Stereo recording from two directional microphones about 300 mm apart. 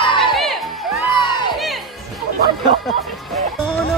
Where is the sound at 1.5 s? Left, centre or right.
Centre.